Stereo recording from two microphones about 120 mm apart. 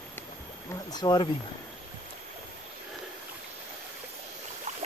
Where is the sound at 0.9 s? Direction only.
35° left (ahead or behind).